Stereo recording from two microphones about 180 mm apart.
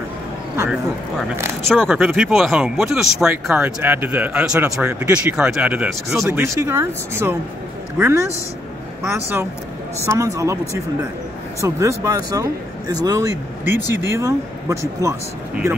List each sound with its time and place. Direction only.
1.7 s speech: centre (ahead or behind); by 10.6 s 15° right (ahead or behind)
11.6 s speech: 15° right (ahead or behind)